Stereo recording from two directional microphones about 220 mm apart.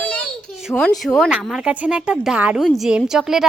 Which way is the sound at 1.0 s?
Centre (ahead or behind).